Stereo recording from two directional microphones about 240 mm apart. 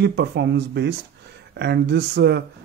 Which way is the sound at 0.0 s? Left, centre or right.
Right.